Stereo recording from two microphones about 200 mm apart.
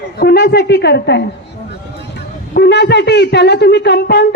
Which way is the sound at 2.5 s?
55° left (ahead or behind).